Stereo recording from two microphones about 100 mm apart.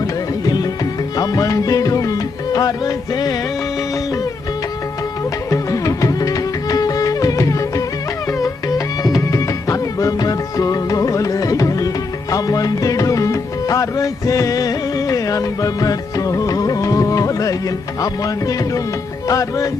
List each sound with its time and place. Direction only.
0.4 s music: 40° left (ahead or behind)
5.5 s music: 35° left (ahead or behind)
9.0 s music: 35° left (ahead or behind)